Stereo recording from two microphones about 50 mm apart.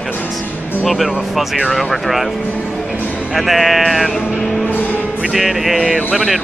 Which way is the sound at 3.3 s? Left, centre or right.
Centre.